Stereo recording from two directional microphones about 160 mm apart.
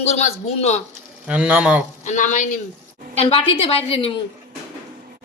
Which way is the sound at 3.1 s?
40° left (ahead or behind).